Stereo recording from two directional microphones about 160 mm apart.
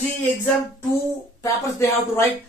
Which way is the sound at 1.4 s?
20° left (ahead or behind).